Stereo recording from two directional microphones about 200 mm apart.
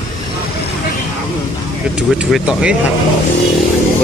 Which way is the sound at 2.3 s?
5° right (ahead or behind).